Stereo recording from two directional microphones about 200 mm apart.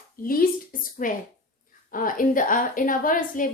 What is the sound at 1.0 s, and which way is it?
A woman's voice, 40° left (ahead or behind).